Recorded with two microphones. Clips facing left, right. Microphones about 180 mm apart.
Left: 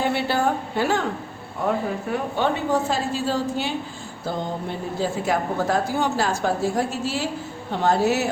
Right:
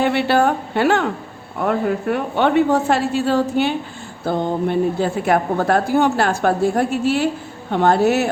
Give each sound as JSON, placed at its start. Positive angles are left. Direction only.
{"t": 0.0, "sound": "a woman's voice", "side_deg": -70}